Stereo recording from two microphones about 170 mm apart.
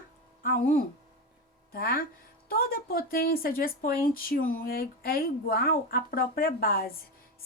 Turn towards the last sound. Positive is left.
turn(degrees=60)  # may be behind; listen again after turning